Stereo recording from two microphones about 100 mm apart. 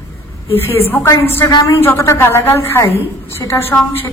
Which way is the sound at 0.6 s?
20° left (ahead or behind).